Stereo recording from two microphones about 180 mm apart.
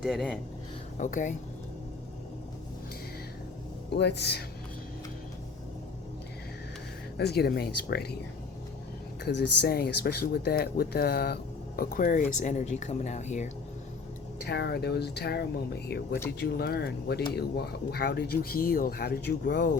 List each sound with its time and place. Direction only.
0.0 s speech: centre (ahead or behind)
0.9 s speech: 45° left (ahead or behind)
3.9 s speech: 70° left (ahead or behind)
7.2 s speech: 65° left (ahead or behind)
9.2 s speech: 65° left (ahead or behind)
11.8 s speech: 50° left (ahead or behind)
14.4 s speech: 65° left (ahead or behind)